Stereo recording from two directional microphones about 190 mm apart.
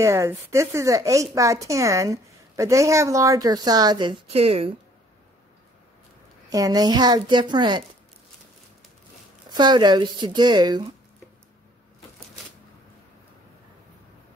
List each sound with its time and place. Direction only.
0.0 s a woman's voice: 15° right (ahead or behind); by 4.6 s 30° right (ahead or behind)
6.5 s a woman's voice: 20° right (ahead or behind)
9.5 s a woman's voice: 25° right (ahead or behind)